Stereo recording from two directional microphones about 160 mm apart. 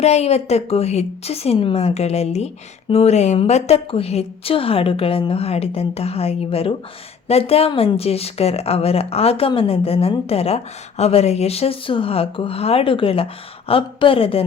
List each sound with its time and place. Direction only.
0.0 s a woman's voice: 40° left (ahead or behind)